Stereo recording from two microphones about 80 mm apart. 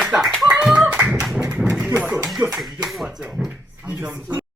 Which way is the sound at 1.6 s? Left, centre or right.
Centre.